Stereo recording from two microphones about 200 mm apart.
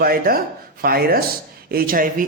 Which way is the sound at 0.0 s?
50° right (ahead or behind).